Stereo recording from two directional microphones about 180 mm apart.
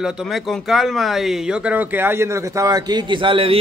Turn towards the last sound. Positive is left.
turn(degrees=-30)  # may be behind; listen again after turning